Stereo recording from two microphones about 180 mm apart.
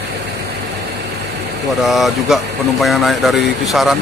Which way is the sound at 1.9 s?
Centre (ahead or behind).